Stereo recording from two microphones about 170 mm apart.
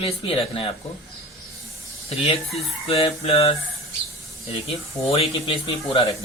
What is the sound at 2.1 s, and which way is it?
Speech, 35° left (ahead or behind).